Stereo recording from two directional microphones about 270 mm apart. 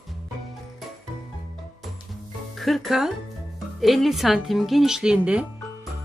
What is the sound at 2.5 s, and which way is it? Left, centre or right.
A woman's voice, centre.